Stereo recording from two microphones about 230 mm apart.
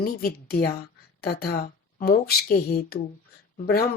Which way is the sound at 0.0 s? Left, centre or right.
Left.